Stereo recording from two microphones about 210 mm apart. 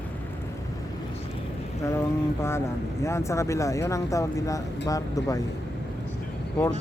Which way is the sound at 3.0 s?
15° left (ahead or behind).